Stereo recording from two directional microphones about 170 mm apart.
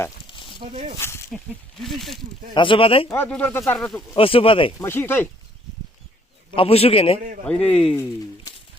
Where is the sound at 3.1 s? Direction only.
10° left (ahead or behind).